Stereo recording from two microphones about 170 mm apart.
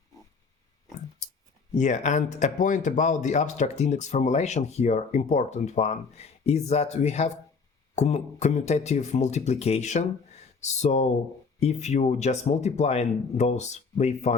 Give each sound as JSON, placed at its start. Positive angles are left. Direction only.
{"t": 1.7, "sound": "speech", "side_deg": 45}